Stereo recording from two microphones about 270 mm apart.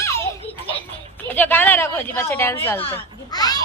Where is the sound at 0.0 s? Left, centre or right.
Centre.